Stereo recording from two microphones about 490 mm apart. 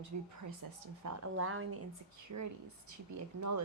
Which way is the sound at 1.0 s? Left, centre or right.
Right.